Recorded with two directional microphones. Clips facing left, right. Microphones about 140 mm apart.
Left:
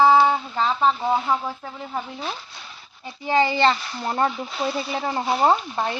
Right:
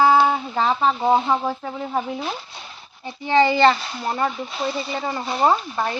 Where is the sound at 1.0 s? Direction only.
25° right (ahead or behind).